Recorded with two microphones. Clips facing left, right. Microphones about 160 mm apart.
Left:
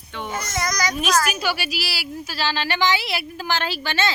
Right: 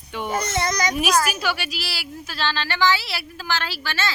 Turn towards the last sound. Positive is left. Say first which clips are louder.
# left 4 dB
turn(degrees=20)  # may be behind; listen again after turning